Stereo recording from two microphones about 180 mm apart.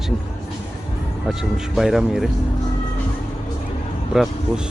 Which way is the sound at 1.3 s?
Centre (ahead or behind).